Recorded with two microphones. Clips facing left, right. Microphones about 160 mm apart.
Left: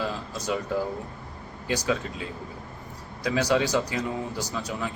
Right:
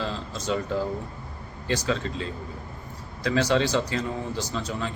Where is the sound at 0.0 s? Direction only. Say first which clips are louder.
Even; 15° left (ahead or behind).